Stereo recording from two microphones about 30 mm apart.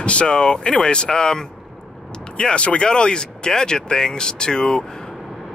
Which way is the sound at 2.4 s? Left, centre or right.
Left.